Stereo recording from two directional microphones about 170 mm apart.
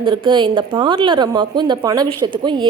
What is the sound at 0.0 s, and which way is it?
Speech, 30° right (ahead or behind).